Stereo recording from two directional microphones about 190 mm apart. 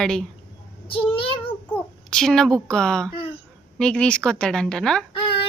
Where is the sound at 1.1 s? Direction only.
30° left (ahead or behind).